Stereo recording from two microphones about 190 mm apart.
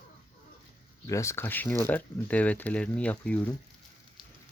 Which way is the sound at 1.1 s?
15° left (ahead or behind).